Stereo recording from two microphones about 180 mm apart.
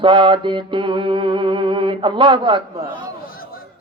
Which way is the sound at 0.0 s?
25° right (ahead or behind).